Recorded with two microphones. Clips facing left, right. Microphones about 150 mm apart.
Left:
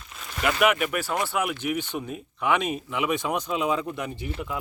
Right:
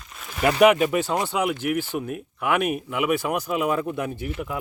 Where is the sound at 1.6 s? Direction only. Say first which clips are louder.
Right 3 dB; 10° right (ahead or behind).